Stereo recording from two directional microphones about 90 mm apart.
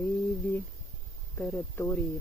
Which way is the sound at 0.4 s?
20° left (ahead or behind).